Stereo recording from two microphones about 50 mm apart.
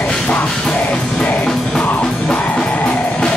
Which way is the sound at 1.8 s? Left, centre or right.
Left.